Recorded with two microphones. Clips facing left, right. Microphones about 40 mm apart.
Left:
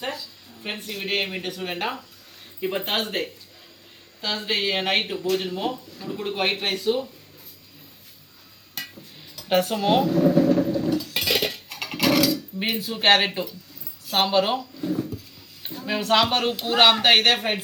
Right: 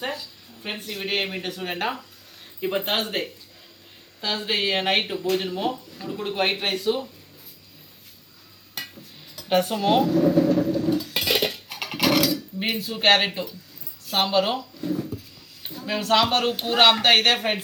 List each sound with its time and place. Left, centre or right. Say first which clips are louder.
0.6 s speech: even; centre
9.3 s speech: even; centre
10.8 s dishes: right 1 dB; centre
11.2 s dishes: right 1 dB; centre
12.0 s a sound: left 1 dB; centre
12.5 s speech: even; centre